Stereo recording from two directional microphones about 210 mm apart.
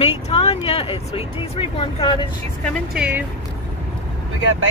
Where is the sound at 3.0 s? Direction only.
10° right (ahead or behind).